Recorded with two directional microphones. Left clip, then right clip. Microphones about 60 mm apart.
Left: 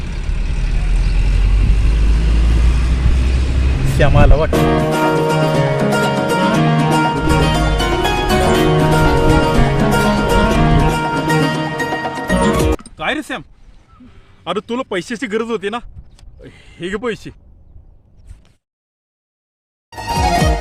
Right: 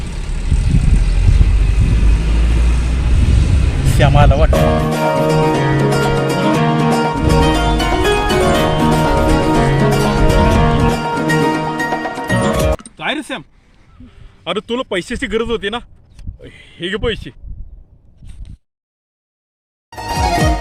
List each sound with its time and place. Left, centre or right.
0.0 s vehicle: right
3.8 s vehicle: centre
4.4 s speech: centre
5.9 s music: centre
13.0 s speech: left
14.4 s speech: centre
16.4 s a sound: centre
16.7 s speech: left
19.9 s music: centre